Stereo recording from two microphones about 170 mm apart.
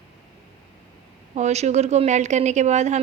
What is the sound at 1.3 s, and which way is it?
Speech, 40° right (ahead or behind).